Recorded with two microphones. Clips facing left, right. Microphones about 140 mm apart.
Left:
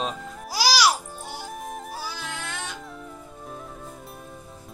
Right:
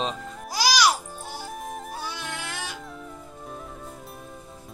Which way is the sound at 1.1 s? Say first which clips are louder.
Even; 10° left (ahead or behind).